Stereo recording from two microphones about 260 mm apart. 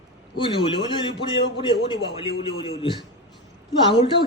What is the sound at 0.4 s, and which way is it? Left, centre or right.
A man's voice, centre.